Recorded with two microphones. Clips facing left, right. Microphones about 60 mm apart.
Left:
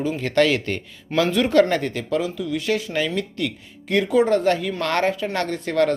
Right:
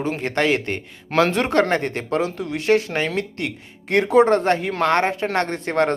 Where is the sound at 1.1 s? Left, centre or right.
Right.